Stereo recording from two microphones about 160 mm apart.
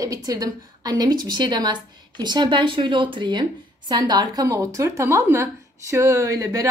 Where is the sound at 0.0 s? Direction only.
20° right (ahead or behind).